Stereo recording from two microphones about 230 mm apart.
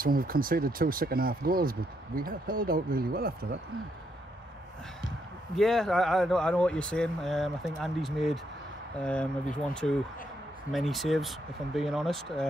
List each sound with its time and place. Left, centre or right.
0.0 s speech: right
5.6 s speech: centre